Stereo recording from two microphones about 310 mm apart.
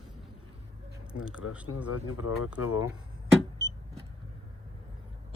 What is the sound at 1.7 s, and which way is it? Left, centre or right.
Speech, left.